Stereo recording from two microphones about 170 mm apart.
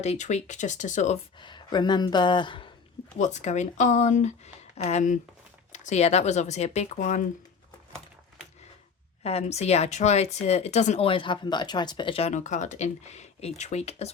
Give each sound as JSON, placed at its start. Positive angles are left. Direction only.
{"t": 0.0, "sound": "speech", "side_deg": 40}
{"t": 1.4, "sound": "speech", "side_deg": 25}
{"t": 3.2, "sound": "speech", "side_deg": 45}
{"t": 9.2, "sound": "speech", "side_deg": 40}